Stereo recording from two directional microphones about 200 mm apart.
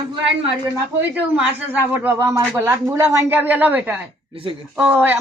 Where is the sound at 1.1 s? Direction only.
10° right (ahead or behind).